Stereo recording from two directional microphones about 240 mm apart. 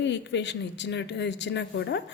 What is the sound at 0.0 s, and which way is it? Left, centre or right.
Speech, left.